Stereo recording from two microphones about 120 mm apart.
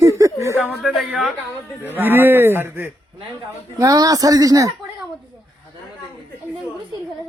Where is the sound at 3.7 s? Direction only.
30° right (ahead or behind).